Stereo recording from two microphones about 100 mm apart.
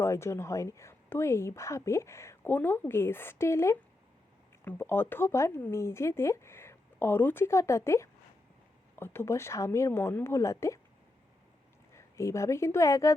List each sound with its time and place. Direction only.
0.0 s speech: 25° left (ahead or behind)
11.9 s a woman's voice: 30° left (ahead or behind)